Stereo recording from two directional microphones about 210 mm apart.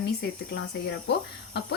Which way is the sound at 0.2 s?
50° left (ahead or behind).